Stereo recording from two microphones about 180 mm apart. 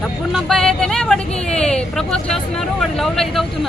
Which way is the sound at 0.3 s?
Centre (ahead or behind).